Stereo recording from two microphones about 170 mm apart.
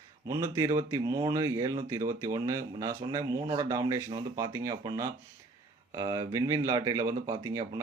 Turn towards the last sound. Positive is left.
turn(degrees=-20)  # may be behind; listen again after turning